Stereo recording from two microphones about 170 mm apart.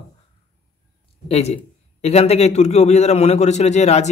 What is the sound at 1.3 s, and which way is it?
A man's voice, 40° left (ahead or behind).